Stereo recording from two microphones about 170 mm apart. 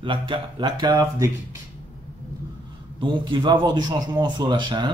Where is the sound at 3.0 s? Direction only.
25° right (ahead or behind).